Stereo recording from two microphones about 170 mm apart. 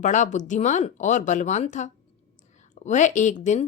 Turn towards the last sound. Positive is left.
turn(degrees=45)  # may be behind; listen again after turning